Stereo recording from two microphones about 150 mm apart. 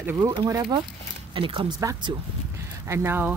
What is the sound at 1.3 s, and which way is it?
Speech, 35° right (ahead or behind).